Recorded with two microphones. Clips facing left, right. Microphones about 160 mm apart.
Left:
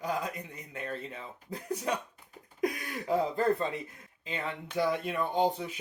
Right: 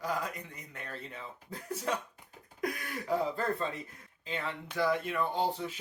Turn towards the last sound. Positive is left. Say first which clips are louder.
# left 4 dB
turn(degrees=20)  # may be behind; listen again after turning